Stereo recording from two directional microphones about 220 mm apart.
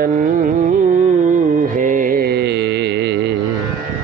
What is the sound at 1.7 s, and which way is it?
Music, 35° right (ahead or behind).